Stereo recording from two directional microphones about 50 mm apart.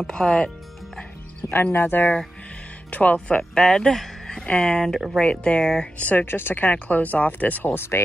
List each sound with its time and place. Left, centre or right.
0.0 s speech: centre
1.5 s speech: left
2.9 s speech: left
3.5 s speech: centre
5.9 s speech: left
6.2 s speech: left
6.7 s speech: left
7.7 s speech: left